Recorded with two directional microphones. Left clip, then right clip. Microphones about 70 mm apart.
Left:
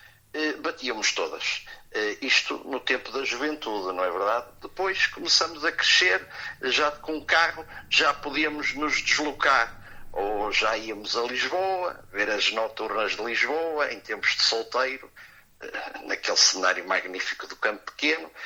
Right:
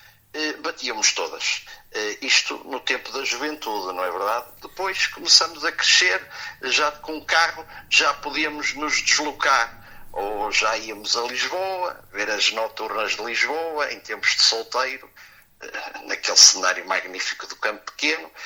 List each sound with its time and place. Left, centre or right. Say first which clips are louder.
0.3 s a man's voice: right 1 dB; left